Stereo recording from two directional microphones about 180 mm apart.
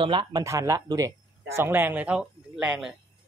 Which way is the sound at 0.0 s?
25° right (ahead or behind).